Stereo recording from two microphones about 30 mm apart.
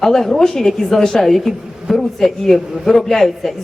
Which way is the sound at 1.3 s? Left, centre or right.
Centre.